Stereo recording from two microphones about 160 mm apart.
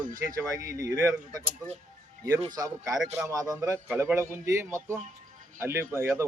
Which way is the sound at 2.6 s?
20° right (ahead or behind).